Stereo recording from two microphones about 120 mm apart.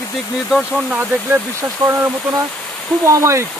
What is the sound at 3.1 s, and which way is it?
Speech, 25° right (ahead or behind).